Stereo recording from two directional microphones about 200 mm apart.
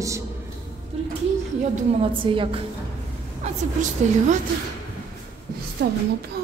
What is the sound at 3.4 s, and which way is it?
Speech, 35° right (ahead or behind).